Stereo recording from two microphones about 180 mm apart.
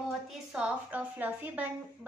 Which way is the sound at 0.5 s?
5° right (ahead or behind).